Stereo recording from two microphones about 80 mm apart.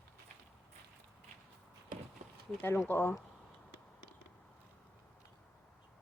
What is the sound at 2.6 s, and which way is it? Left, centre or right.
Speech, left.